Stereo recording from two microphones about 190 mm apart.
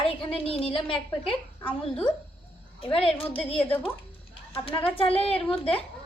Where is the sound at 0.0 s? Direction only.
30° left (ahead or behind).